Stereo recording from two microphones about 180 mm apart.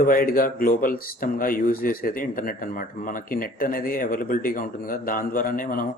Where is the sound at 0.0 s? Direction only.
50° left (ahead or behind).